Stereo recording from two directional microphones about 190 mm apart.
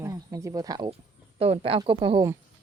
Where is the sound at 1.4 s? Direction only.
30° right (ahead or behind).